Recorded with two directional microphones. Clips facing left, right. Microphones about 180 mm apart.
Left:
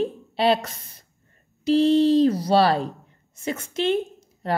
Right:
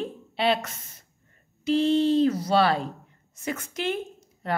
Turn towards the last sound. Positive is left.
turn(degrees=30)  # may be behind; listen again after turning